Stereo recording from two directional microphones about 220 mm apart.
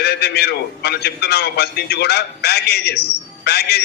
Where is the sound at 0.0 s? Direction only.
45° left (ahead or behind).